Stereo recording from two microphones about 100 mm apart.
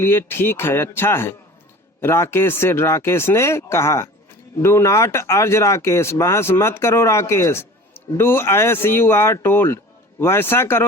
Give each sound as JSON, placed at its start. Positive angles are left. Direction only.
{"t": 0.0, "sound": "speech", "side_deg": 20}